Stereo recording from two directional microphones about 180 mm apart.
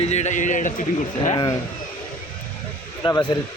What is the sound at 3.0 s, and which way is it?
Speech, 25° left (ahead or behind).